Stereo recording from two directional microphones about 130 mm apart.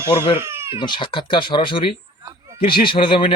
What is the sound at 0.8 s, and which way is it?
Speech, 40° left (ahead or behind).